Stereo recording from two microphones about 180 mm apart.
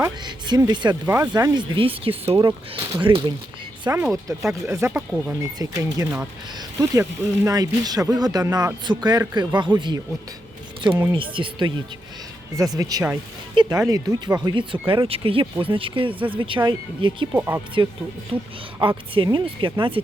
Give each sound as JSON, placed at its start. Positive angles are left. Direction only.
{"t": 0.0, "sound": "speech", "side_deg": -25}
{"t": 10.8, "sound": "a sound", "side_deg": -25}
{"t": 11.1, "sound": "speech", "side_deg": -30}
{"t": 17.3, "sound": "speech", "side_deg": -10}
{"t": 18.3, "sound": "speech", "side_deg": -30}